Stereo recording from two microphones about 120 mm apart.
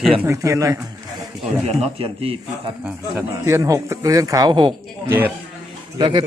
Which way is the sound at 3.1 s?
25° right (ahead or behind).